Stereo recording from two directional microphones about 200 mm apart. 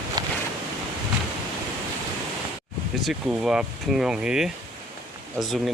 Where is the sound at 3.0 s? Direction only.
5° right (ahead or behind).